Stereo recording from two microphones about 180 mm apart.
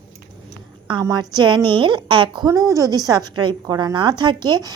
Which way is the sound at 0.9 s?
25° right (ahead or behind).